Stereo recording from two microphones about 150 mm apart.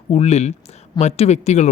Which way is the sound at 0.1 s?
45° left (ahead or behind).